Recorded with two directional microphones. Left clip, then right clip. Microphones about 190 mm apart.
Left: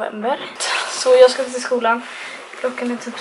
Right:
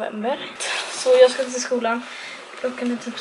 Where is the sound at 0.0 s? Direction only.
25° left (ahead or behind).